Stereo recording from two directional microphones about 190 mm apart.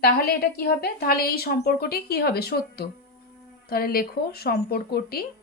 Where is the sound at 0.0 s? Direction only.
55° left (ahead or behind).